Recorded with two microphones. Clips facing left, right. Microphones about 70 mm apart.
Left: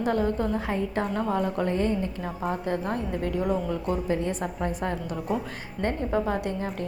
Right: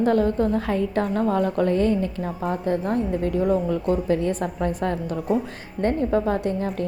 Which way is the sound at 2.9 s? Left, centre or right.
Right.